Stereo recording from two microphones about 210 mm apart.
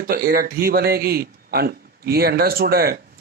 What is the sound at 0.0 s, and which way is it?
A man's voice, 45° right (ahead or behind).